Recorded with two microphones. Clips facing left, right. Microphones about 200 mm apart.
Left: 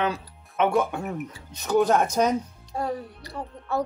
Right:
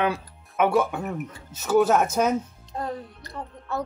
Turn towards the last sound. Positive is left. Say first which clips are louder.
# left 3 dB
turn(degrees=10)  # may be behind; listen again after turning